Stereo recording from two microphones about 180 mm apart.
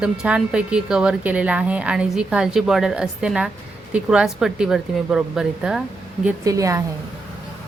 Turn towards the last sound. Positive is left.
turn(degrees=-20)  # may be behind; listen again after turning